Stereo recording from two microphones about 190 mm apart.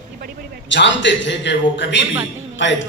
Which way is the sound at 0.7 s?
70° left (ahead or behind).